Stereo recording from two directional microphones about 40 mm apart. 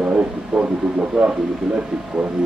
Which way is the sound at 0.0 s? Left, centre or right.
Right.